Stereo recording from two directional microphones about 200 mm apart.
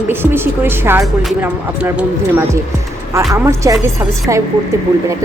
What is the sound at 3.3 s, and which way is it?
A woman's voice, 15° right (ahead or behind).